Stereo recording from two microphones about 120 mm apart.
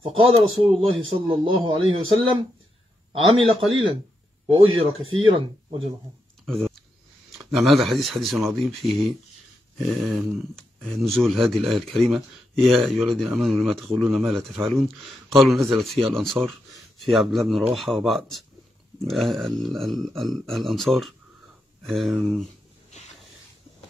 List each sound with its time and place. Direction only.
0.0 s a man's voice: 55° right (ahead or behind)
6.4 s speech: centre (ahead or behind)